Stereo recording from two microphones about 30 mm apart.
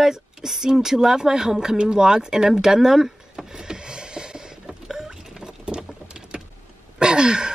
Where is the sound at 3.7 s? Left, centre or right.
Right.